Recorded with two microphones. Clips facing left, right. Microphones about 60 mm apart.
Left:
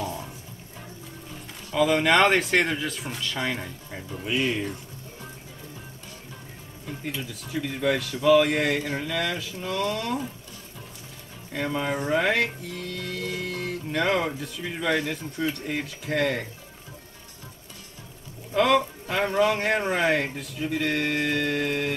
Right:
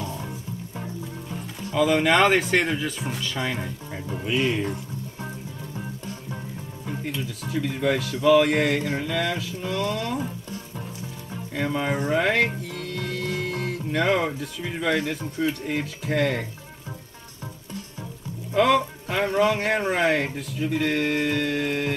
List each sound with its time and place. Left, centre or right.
1.7 s speech: centre
7.2 s speech: centre
11.5 s speech: centre
18.5 s speech: centre